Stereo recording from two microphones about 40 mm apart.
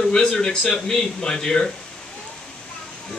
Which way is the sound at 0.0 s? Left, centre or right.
Centre.